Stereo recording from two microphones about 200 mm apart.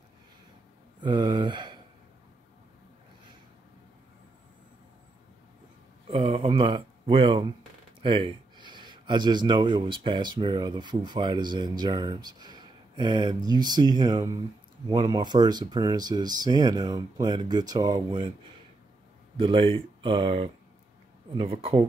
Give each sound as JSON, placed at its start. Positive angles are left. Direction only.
{"t": 1.0, "sound": "speech", "side_deg": -25}
{"t": 6.0, "sound": "speech", "side_deg": -30}
{"t": 19.3, "sound": "speech", "side_deg": -25}